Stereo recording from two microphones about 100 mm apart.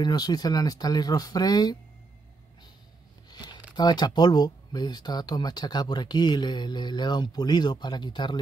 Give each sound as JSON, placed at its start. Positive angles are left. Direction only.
{"t": 0.0, "sound": "speech", "side_deg": 40}
{"t": 3.7, "sound": "speech", "side_deg": 45}